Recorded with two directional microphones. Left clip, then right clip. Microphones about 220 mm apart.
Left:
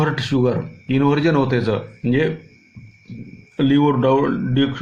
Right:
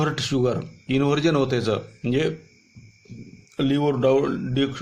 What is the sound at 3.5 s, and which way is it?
Speech, 20° right (ahead or behind).